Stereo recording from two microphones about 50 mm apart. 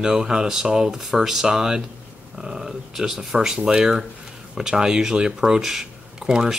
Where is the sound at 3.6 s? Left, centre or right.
Right.